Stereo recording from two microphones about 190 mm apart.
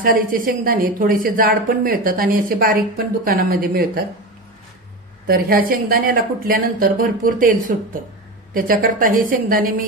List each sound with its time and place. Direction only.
0.0 s a woman's voice: 45° right (ahead or behind)
5.2 s a woman's voice: 50° right (ahead or behind)